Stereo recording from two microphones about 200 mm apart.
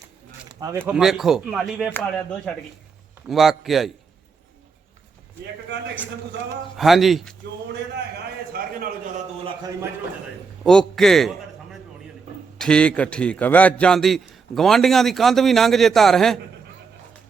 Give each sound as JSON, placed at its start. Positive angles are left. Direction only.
{"t": 0.4, "sound": "a sound", "side_deg": -20}
{"t": 0.9, "sound": "a man's voice", "side_deg": -5}
{"t": 6.7, "sound": "a man's voice", "side_deg": 0}
{"t": 7.4, "sound": "a man's voice", "side_deg": -60}
{"t": 10.6, "sound": "a sound", "side_deg": 0}
{"t": 12.5, "sound": "a man's voice", "side_deg": 5}